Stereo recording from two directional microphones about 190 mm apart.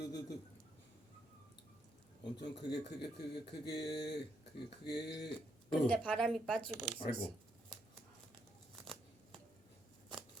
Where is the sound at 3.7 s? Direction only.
20° left (ahead or behind).